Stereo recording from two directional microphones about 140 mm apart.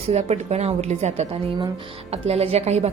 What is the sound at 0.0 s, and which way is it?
A woman's voice, 50° right (ahead or behind).